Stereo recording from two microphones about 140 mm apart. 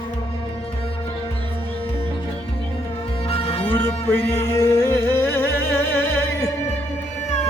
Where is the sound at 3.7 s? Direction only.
15° left (ahead or behind).